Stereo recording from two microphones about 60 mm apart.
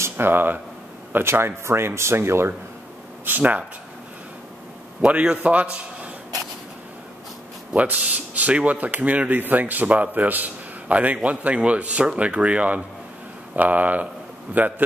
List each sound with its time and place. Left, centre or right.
0.0 s speech: right
3.3 s speech: right
5.0 s speech: centre
7.7 s a man's voice: right